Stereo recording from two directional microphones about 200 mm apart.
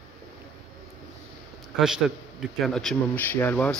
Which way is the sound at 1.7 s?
Centre (ahead or behind).